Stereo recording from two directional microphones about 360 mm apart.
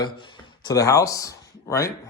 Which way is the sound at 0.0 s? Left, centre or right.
Centre.